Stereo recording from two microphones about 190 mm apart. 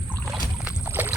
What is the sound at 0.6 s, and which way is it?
Rowboat, 10° right (ahead or behind).